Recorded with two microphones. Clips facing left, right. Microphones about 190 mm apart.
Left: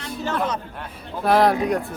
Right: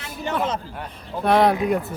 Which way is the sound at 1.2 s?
Centre (ahead or behind).